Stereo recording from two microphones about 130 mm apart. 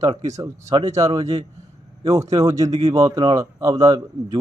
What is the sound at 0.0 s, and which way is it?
Speech, 25° right (ahead or behind).